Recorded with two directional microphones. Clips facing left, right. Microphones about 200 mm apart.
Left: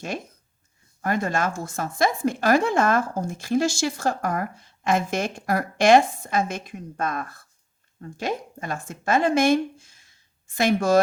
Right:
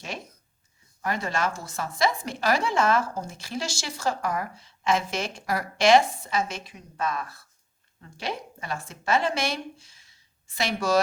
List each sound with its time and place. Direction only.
1.0 s speech: 50° left (ahead or behind)